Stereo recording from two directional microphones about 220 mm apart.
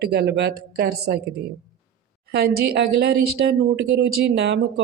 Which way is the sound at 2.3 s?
45° right (ahead or behind).